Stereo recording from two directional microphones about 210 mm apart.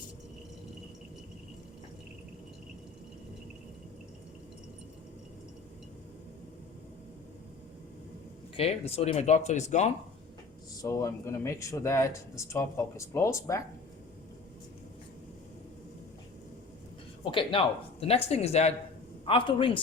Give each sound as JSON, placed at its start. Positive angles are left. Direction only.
{"t": 8.5, "sound": "speech", "side_deg": 30}
{"t": 10.8, "sound": "speech", "side_deg": 15}
{"t": 17.3, "sound": "speech", "side_deg": 25}